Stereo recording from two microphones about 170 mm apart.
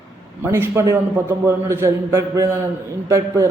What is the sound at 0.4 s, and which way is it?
Speech, 15° right (ahead or behind).